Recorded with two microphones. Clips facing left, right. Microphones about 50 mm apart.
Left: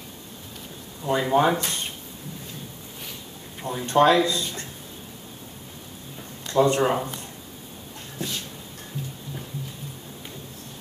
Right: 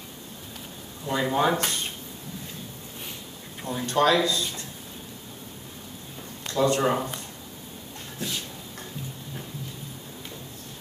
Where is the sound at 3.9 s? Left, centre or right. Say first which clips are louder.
Left 4 dB; left.